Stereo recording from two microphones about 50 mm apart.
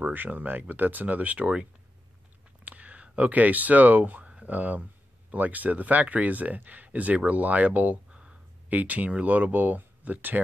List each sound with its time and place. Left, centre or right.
0.1 s speech: right
8.1 s a sound: right
8.6 s speech: right